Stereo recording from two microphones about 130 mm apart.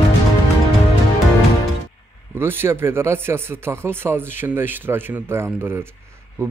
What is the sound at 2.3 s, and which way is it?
A man's voice, 20° right (ahead or behind).